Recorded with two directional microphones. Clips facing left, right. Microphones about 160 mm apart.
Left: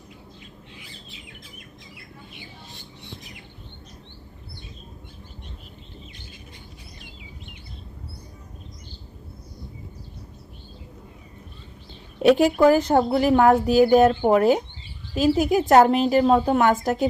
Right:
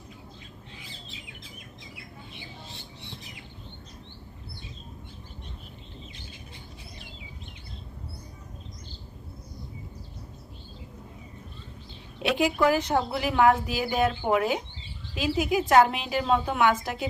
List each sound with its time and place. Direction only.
12.2 s speech: 45° left (ahead or behind)